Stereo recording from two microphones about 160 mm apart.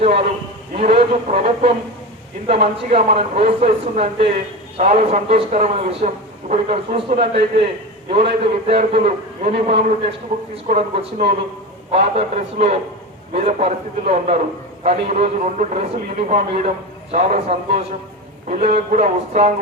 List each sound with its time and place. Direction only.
0.8 s a man's voice: 45° right (ahead or behind)